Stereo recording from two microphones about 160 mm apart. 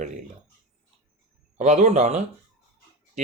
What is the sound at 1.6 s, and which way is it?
Speech, 50° right (ahead or behind).